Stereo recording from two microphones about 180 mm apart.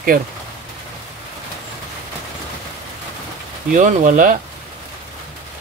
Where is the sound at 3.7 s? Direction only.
45° right (ahead or behind).